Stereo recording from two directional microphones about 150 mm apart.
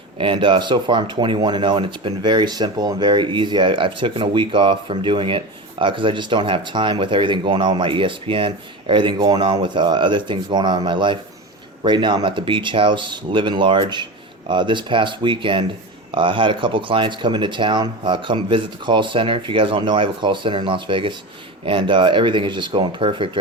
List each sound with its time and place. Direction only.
0.2 s speech: 35° right (ahead or behind)